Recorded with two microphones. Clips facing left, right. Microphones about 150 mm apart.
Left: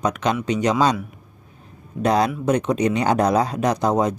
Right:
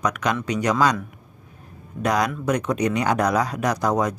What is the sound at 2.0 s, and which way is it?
Speech, 30° left (ahead or behind).